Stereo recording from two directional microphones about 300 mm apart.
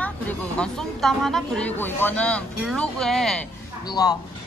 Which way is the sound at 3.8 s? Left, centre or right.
Centre.